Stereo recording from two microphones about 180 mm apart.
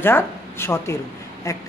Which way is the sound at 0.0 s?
10° left (ahead or behind).